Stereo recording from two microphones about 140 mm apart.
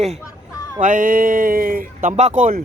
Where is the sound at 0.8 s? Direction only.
75° right (ahead or behind); by 1.9 s 90° right.